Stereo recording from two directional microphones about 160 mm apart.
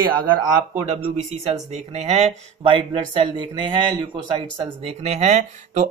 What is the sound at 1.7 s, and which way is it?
Speech, 40° right (ahead or behind).